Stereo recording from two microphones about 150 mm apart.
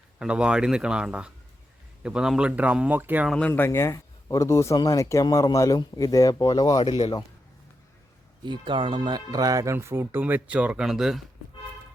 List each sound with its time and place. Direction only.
0.2 s speech: 5° right (ahead or behind)
3.2 s speech: 5° left (ahead or behind); by 6.8 s 25° left (ahead or behind)
6.8 s a man's voice: 45° left (ahead or behind)
8.4 s speech: 35° right (ahead or behind); by 11.2 s 5° right (ahead or behind)